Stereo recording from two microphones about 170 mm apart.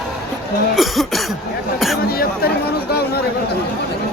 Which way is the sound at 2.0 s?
65° left (ahead or behind).